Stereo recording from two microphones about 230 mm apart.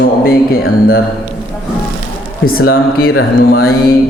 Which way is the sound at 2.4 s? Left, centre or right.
Left.